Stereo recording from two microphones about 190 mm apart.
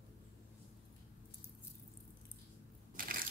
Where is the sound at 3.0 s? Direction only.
50° right (ahead or behind).